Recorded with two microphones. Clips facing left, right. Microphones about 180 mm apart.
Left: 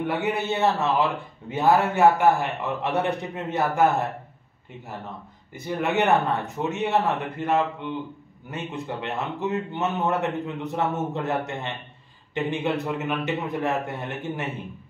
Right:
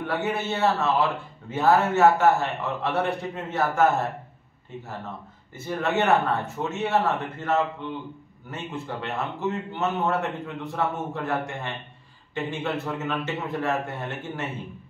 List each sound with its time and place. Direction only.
0.0 s a man's voice: 15° left (ahead or behind)
5.5 s a man's voice: 15° left (ahead or behind)